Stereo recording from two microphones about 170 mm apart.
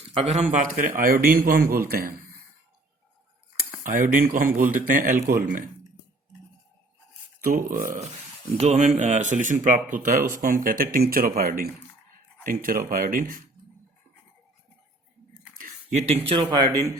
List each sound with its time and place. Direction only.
0.2 s speech: 45° right (ahead or behind); by 2.1 s 60° right (ahead or behind)
3.8 s speech: 50° right (ahead or behind)
7.8 s speech: 45° right (ahead or behind)
15.5 s a sound: 50° right (ahead or behind)
16.3 s speech: 30° right (ahead or behind)